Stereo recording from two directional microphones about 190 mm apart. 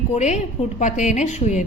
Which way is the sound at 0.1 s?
35° left (ahead or behind).